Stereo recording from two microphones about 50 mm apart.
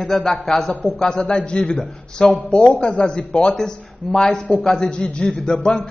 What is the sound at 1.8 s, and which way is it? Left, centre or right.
A man's voice, centre.